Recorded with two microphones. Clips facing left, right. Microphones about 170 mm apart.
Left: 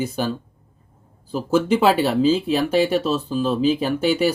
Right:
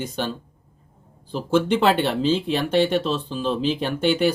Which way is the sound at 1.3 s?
5° left (ahead or behind).